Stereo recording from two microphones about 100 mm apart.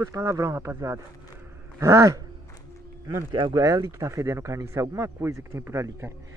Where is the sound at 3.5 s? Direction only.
35° right (ahead or behind).